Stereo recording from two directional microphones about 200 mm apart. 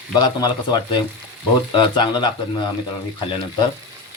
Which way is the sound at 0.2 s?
20° left (ahead or behind).